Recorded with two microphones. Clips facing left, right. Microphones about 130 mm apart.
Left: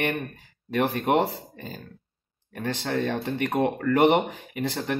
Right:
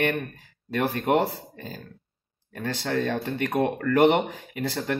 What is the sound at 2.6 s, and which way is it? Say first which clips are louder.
Speech: even; 15° left (ahead or behind).